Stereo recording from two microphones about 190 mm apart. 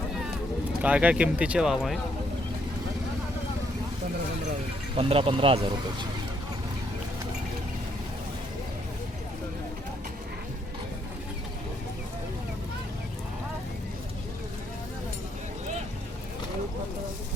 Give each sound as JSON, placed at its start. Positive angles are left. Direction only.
{"t": 0.8, "sound": "speech", "side_deg": -5}
{"t": 4.9, "sound": "speech", "side_deg": -30}